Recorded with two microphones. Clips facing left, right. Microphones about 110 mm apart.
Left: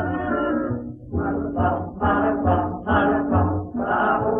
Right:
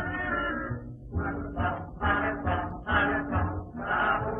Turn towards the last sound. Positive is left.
turn(degrees=30)  # may be behind; listen again after turning